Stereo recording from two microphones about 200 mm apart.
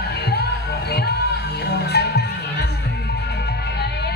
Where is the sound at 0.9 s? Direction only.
55° left (ahead or behind).